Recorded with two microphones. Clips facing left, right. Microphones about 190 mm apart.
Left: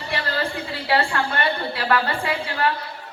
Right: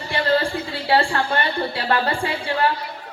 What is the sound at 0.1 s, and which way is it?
A woman's voice, 30° right (ahead or behind).